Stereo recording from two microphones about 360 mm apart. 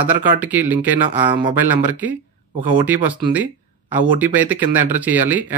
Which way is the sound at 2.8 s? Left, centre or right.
Centre.